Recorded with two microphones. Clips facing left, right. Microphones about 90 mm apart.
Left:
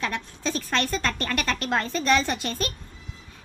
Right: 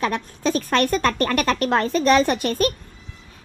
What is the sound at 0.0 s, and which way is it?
A woman's voice, 50° right (ahead or behind).